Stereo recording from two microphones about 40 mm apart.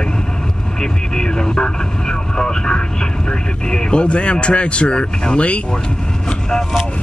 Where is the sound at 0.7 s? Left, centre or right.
Centre.